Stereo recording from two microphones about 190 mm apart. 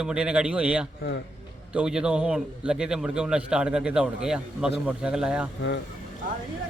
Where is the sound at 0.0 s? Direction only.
5° right (ahead or behind).